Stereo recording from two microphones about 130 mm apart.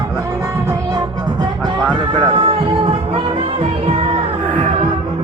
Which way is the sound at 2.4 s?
45° right (ahead or behind).